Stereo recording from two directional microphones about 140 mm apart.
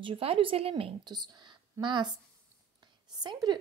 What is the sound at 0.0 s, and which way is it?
A woman's voice, 40° right (ahead or behind).